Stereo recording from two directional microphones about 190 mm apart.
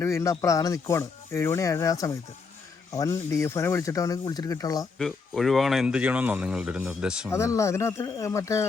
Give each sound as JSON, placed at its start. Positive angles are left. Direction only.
{"t": 0.0, "sound": "speech", "side_deg": 15}
{"t": 4.9, "sound": "speech", "side_deg": 0}
{"t": 7.3, "sound": "speech", "side_deg": 15}